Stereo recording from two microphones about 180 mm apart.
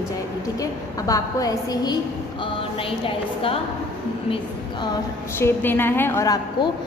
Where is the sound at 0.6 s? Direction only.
20° left (ahead or behind).